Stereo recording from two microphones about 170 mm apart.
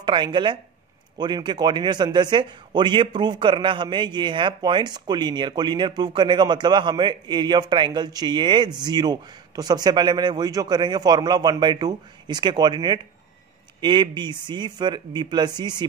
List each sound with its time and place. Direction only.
0.0 s a man's voice: 25° right (ahead or behind)